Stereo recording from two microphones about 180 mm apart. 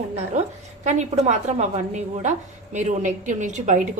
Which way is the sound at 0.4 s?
40° right (ahead or behind).